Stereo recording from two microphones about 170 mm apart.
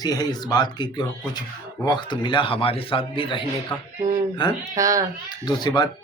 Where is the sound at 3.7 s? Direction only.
10° left (ahead or behind).